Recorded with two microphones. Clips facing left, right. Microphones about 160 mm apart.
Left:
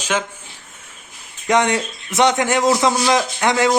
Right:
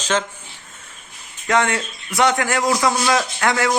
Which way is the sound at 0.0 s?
10° left (ahead or behind).